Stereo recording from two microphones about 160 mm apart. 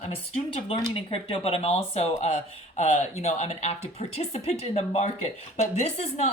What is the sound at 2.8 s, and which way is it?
Speech, 45° left (ahead or behind).